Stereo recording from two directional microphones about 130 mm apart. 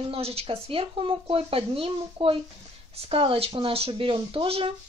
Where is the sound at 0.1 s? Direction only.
50° right (ahead or behind).